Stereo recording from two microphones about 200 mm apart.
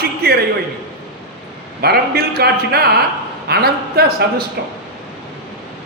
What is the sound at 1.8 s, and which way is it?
A man's voice, 50° right (ahead or behind).